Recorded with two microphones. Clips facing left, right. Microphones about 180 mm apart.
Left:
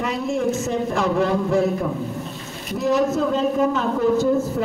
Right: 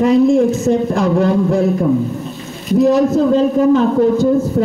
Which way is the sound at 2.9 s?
35° right (ahead or behind).